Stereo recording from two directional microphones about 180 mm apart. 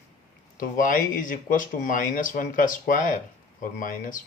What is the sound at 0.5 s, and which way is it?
Speech, 50° left (ahead or behind).